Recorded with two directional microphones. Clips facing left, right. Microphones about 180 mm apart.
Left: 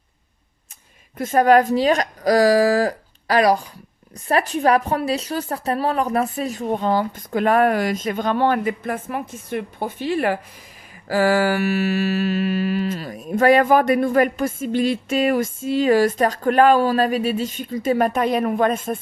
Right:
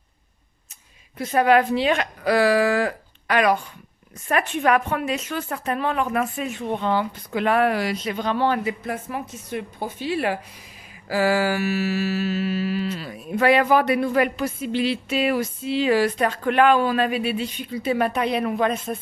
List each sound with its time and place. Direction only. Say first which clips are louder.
1.1 s a woman's voice: left 3 dB; 45° left (ahead or behind)
4.3 s music: left 3 dB; 35° left (ahead or behind)